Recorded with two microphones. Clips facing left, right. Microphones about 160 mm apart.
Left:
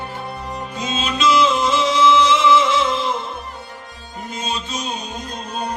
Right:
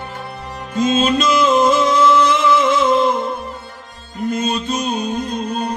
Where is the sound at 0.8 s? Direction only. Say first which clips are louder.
Right 7 dB; 50° right (ahead or behind).